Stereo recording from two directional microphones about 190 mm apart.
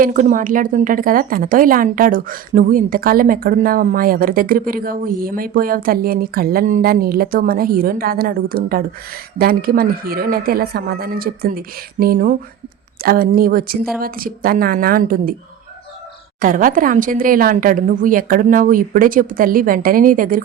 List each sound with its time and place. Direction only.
0.0 s a woman's voice: 40° right (ahead or behind)
16.4 s a woman's voice: 45° right (ahead or behind)